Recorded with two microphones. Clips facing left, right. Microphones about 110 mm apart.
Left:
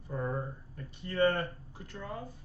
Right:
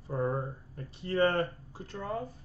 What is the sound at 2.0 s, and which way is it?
Speech, 45° right (ahead or behind).